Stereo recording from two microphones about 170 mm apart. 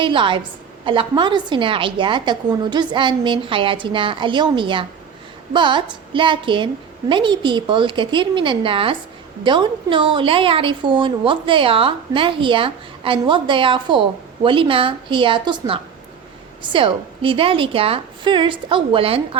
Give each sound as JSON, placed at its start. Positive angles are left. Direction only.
{"t": 0.0, "sound": "a woman's voice", "side_deg": -30}